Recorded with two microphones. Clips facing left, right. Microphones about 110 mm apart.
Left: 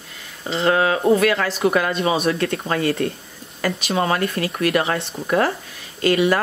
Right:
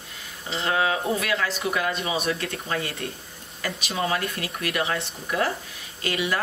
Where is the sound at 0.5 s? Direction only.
55° left (ahead or behind).